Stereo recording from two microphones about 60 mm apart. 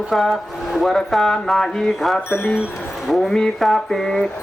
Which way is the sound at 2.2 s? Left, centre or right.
Left.